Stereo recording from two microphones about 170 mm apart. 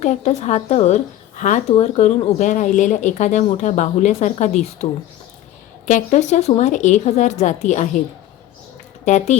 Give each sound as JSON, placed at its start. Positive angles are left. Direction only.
{"t": 0.0, "sound": "speech", "side_deg": 45}
{"t": 9.0, "sound": "speech", "side_deg": 45}